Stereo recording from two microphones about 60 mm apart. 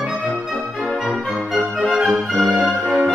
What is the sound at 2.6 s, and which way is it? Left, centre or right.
Brass instrument, centre.